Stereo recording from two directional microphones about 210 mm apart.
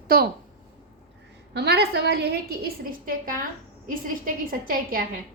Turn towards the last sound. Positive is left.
turn(degrees=-45)  # may be behind; listen again after turning